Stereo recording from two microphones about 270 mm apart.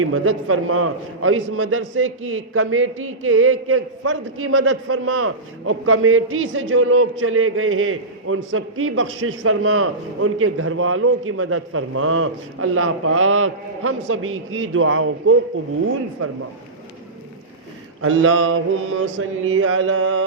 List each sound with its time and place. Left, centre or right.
0.0 s a man's voice: right
18.0 s a man's voice: right